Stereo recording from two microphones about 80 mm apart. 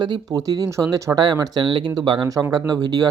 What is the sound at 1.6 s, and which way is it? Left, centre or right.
Speech, right.